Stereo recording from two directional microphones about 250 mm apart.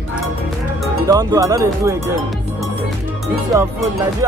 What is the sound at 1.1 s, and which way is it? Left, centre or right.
Speech, centre.